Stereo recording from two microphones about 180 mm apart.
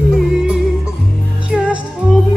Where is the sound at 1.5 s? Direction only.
5° right (ahead or behind).